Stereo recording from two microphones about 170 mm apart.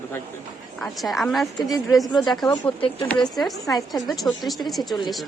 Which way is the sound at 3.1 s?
Centre (ahead or behind).